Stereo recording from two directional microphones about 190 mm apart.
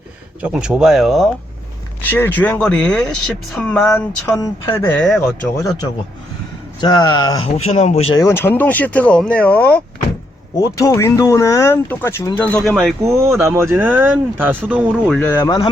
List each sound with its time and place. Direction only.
0.4 s speech: 5° right (ahead or behind)
2.0 s speech: 10° left (ahead or behind)
4.4 s speech: 15° left (ahead or behind)
5.5 s speech: 20° left (ahead or behind)
7.5 s speech: 35° left (ahead or behind)
8.1 s speech: 15° left (ahead or behind)
13.4 s speech: 15° right (ahead or behind)
15.1 s speech: 10° left (ahead or behind)
15.4 s speech: 20° left (ahead or behind)